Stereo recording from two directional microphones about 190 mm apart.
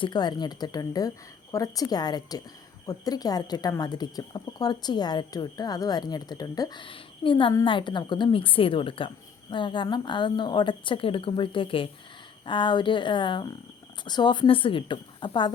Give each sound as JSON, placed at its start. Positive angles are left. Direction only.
{"t": 0.0, "sound": "speech", "side_deg": 20}